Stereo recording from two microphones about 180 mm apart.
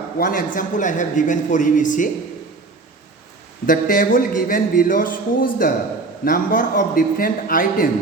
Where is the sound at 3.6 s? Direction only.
50° left (ahead or behind).